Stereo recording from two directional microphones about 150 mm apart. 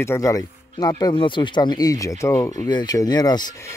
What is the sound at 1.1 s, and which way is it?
Speech, 35° left (ahead or behind).